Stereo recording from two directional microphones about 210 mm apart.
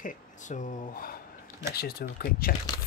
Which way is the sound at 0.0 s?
35° left (ahead or behind).